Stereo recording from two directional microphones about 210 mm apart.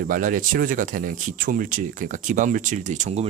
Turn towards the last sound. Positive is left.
turn(degrees=-35)  # may be behind; listen again after turning